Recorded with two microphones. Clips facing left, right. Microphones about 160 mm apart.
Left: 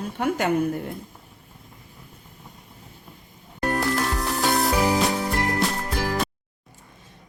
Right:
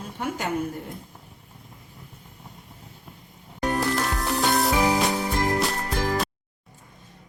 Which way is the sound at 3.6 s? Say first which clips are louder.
Left 1 dB; centre (ahead or behind).